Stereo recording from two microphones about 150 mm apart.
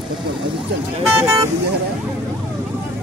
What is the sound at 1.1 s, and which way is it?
Speech, 20° right (ahead or behind).